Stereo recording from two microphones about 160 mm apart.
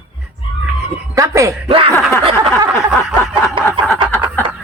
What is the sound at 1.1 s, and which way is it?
Speech, 20° right (ahead or behind).